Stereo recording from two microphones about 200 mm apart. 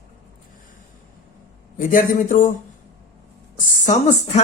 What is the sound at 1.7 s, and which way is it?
Speech, 40° left (ahead or behind).